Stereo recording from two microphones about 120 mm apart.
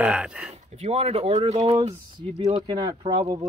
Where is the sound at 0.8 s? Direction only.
60° right (ahead or behind).